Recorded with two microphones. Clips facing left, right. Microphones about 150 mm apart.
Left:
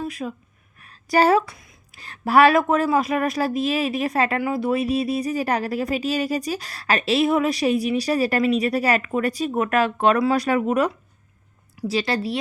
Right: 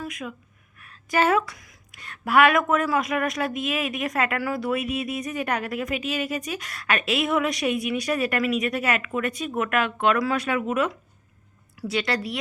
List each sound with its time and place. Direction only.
0.0 s speech: 30° left (ahead or behind)
11.9 s a woman's voice: 25° left (ahead or behind)